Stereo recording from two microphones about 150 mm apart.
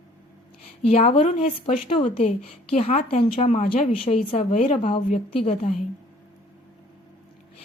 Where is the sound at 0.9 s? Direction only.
45° left (ahead or behind).